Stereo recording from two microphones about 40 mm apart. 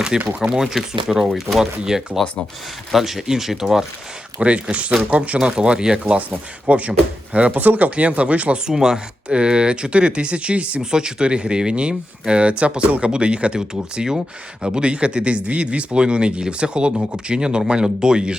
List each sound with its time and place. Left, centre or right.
0.1 s speech: centre
1.8 s speech: right
2.9 s speech: centre
4.4 s speech: right
5.4 s speech: right
6.7 s speech: right
8.6 s speech: centre
10.8 s speech: centre